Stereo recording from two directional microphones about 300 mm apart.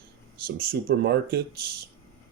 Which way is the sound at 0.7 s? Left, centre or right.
Right.